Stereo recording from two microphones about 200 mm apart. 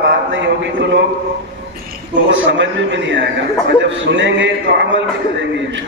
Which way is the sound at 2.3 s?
70° right (ahead or behind).